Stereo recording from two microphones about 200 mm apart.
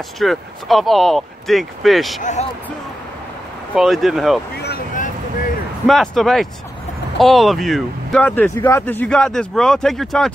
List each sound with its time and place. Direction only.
0.2 s speech: centre (ahead or behind)
3.7 s speech: centre (ahead or behind)
4.6 s vehicle: 50° left (ahead or behind)
5.9 s speech: centre (ahead or behind)